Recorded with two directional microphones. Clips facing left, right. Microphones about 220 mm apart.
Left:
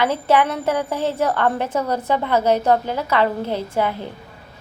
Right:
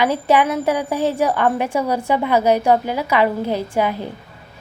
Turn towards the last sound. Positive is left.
turn(degrees=-15)  # may be behind; listen again after turning